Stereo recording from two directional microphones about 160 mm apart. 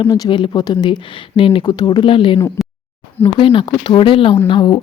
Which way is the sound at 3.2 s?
35° left (ahead or behind).